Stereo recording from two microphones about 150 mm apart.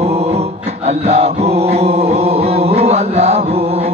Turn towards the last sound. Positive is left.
turn(degrees=-40)  # may be behind; listen again after turning